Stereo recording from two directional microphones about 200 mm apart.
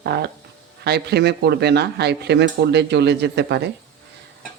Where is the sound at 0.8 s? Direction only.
55° right (ahead or behind).